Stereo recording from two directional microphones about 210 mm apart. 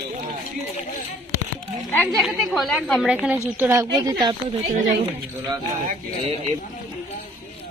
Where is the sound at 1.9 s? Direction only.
5° left (ahead or behind); by 4.4 s 20° right (ahead or behind).